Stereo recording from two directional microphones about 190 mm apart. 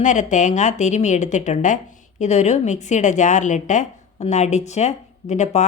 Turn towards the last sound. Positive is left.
turn(degrees=35)  # may be behind; listen again after turning